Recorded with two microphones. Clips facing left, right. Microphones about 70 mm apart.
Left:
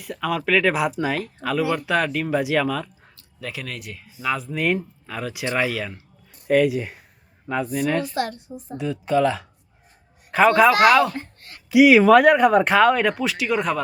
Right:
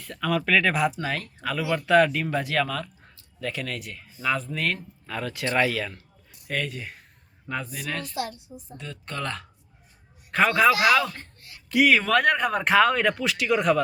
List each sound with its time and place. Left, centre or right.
0.0 s speech: centre
8.1 s a woman's voice: left
8.8 s speech: centre
11.3 s a sound: left
11.7 s speech: centre